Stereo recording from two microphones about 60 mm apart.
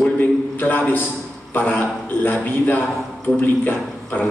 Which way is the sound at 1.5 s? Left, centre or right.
Left.